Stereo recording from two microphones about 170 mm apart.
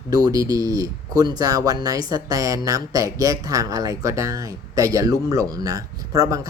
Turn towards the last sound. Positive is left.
turn(degrees=-20)  # may be behind; listen again after turning